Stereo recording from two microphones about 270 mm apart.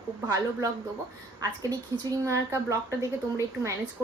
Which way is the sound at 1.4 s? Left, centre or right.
Centre.